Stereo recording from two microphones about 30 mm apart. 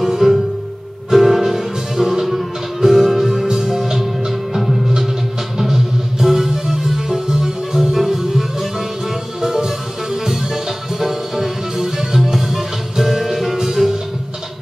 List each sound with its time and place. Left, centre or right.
0.0 s music: centre